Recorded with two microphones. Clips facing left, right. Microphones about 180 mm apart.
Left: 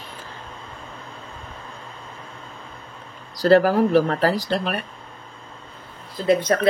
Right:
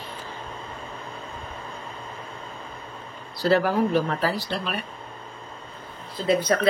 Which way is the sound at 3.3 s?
40° left (ahead or behind).